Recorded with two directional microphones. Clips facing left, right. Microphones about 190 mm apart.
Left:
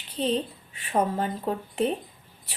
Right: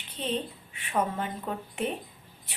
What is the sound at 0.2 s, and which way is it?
Speech, 35° left (ahead or behind).